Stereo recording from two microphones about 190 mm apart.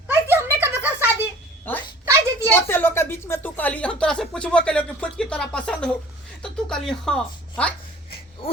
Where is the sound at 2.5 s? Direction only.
10° left (ahead or behind).